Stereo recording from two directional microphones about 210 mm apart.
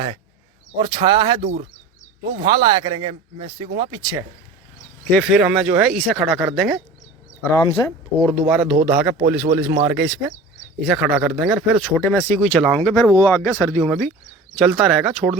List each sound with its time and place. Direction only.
0.8 s speech: 20° right (ahead or behind)
1.4 s speech: 40° right (ahead or behind)
2.4 s speech: 20° right (ahead or behind)
5.1 s speech: centre (ahead or behind)
7.5 s speech: 20° left (ahead or behind)
8.4 s speech: centre (ahead or behind)
8.7 s speech: 35° right (ahead or behind)
9.2 s speech: 10° right (ahead or behind)
11.9 s speech: 10° left (ahead or behind)
13.0 s speech: 15° left (ahead or behind); by 15.4 s centre (ahead or behind)